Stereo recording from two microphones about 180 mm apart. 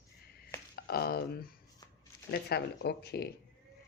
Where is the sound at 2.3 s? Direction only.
65° left (ahead or behind).